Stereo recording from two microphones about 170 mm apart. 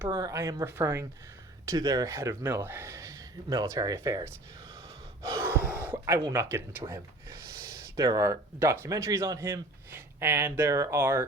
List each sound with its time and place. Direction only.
0.0 s speech: 20° right (ahead or behind)
5.2 s gasp: 20° right (ahead or behind)
5.8 s a sound: 15° right (ahead or behind)
6.3 s speech: 15° right (ahead or behind)